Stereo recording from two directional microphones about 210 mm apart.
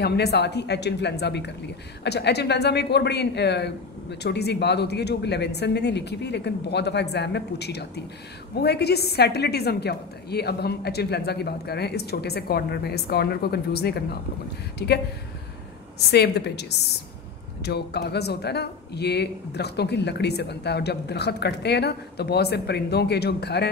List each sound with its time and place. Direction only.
0.0 s speech: 50° left (ahead or behind)
16.1 s speech: 50° left (ahead or behind)
17.6 s speech: 50° left (ahead or behind)